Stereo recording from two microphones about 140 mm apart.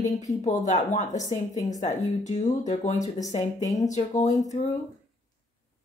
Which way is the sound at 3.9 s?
60° left (ahead or behind).